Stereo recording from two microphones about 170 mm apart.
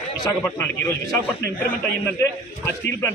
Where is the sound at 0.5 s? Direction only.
15° left (ahead or behind).